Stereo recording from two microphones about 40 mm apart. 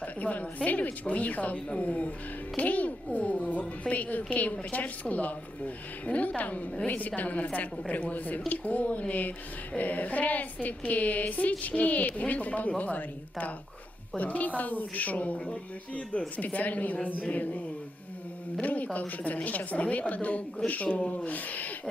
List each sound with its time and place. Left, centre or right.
0.0 s a woman's voice: left
14.2 s a woman's voice: left
18.6 s a woman's voice: left